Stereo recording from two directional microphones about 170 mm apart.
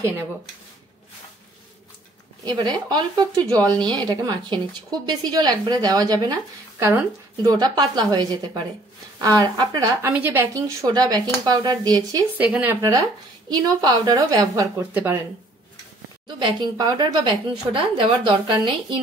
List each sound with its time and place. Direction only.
0.0 s speech: 15° right (ahead or behind)
2.4 s a woman's voice: 25° right (ahead or behind)
10.1 s a woman's voice: 10° right (ahead or behind)
12.4 s speech: 10° right (ahead or behind)
13.5 s a woman's voice: 25° right (ahead or behind)
16.3 s a woman's voice: 25° right (ahead or behind)